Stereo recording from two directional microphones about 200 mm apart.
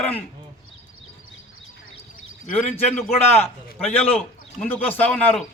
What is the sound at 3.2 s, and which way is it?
Speech, 30° left (ahead or behind).